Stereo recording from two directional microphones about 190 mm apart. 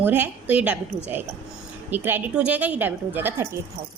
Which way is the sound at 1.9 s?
10° right (ahead or behind).